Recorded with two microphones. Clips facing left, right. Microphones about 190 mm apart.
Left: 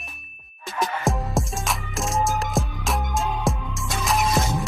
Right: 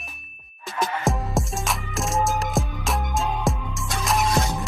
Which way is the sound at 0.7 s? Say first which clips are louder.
Even; centre (ahead or behind).